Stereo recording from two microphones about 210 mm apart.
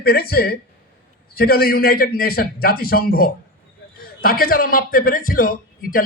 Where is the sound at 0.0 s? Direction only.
45° left (ahead or behind).